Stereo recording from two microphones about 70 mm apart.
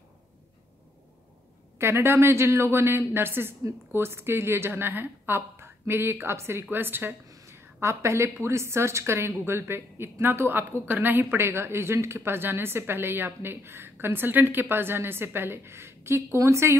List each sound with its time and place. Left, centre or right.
1.8 s speech: right
7.2 s a woman's voice: right